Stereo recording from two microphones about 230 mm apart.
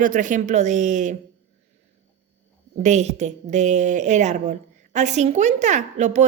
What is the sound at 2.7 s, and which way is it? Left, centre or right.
A woman's voice, right.